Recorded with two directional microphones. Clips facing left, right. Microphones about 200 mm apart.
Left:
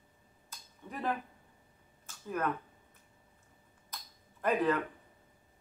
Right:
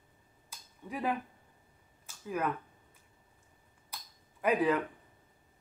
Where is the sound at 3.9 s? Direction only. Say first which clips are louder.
Even; 10° right (ahead or behind).